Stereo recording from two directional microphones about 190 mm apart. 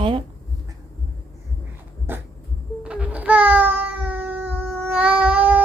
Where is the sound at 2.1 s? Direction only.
10° right (ahead or behind).